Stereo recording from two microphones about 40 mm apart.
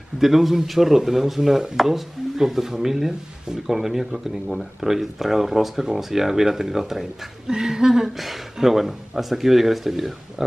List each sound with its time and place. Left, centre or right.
0.2 s speech: centre